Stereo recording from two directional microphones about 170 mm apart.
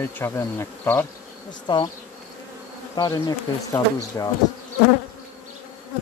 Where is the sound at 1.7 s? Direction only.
25° left (ahead or behind).